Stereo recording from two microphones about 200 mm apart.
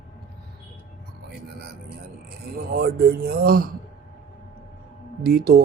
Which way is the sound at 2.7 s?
50° right (ahead or behind).